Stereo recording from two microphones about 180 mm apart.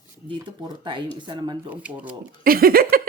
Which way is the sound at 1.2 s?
25° right (ahead or behind).